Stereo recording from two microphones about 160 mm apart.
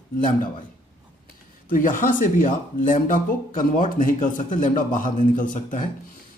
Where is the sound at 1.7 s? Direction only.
55° left (ahead or behind).